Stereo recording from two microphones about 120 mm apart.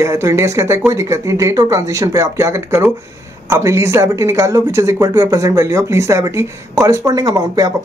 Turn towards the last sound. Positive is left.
turn(degrees=-30)  # may be behind; listen again after turning